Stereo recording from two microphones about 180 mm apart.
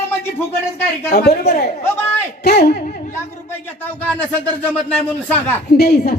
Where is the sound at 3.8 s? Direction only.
10° left (ahead or behind).